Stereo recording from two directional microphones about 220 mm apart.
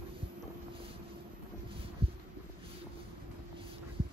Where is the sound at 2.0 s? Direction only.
25° right (ahead or behind).